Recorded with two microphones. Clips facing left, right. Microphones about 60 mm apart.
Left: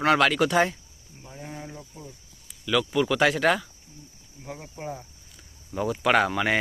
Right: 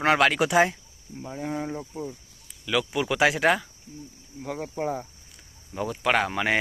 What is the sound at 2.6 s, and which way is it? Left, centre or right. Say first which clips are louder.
Speech: left 2 dB; centre.